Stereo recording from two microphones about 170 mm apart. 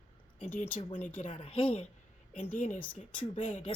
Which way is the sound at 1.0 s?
50° left (ahead or behind).